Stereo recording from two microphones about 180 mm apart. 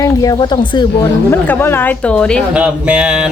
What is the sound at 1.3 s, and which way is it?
Speech, 10° left (ahead or behind).